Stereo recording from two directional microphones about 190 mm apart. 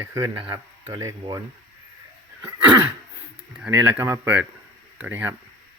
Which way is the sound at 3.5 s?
5° right (ahead or behind).